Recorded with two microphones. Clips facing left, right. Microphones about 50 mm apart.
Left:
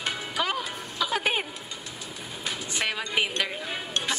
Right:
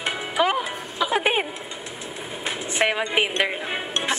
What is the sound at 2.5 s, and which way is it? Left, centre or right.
Music, right.